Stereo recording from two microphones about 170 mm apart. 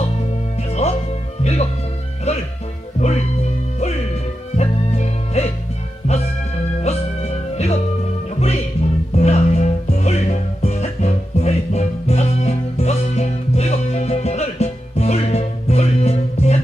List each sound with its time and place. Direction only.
0.7 s music: 40° left (ahead or behind)
2.3 s music: 40° left (ahead or behind)
4.5 s music: 40° left (ahead or behind)
6.8 s music: 40° left (ahead or behind)